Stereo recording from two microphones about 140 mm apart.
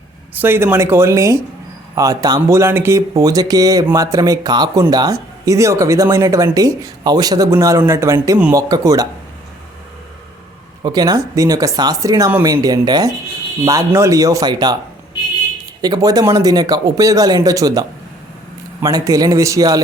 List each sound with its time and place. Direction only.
0.3 s speech: 15° right (ahead or behind)
10.8 s speech: 25° right (ahead or behind)
15.8 s speech: 25° right (ahead or behind)